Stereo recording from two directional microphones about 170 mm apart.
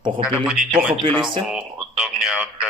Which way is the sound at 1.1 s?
Centre (ahead or behind).